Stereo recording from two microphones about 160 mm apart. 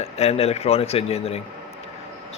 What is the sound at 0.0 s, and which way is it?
A man's voice, 40° left (ahead or behind).